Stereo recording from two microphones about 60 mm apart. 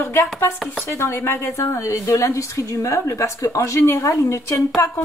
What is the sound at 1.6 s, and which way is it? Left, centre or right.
A woman's voice, left.